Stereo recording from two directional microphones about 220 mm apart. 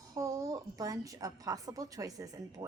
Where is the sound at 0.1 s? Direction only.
15° right (ahead or behind).